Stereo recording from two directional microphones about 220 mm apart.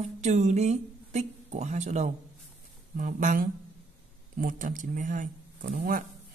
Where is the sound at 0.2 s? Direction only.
30° right (ahead or behind).